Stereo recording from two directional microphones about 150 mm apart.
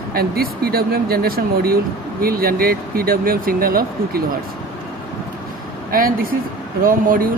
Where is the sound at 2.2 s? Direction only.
80° right.